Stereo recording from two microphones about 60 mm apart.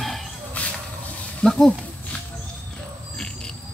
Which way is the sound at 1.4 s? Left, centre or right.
Centre.